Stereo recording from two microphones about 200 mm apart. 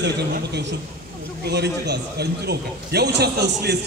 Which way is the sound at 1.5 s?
55° right (ahead or behind).